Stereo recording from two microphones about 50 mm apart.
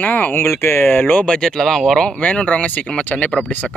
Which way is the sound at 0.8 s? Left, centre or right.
Left.